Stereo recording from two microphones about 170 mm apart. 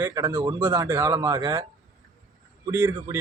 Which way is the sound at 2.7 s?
15° right (ahead or behind).